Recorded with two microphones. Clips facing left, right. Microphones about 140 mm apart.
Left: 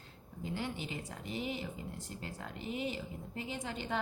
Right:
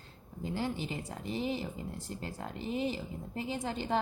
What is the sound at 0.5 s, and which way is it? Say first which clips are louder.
A woman's voice: right 5 dB; 35° right (ahead or behind).